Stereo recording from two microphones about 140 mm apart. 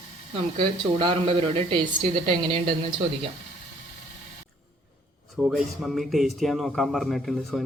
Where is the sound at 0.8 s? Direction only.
35° right (ahead or behind).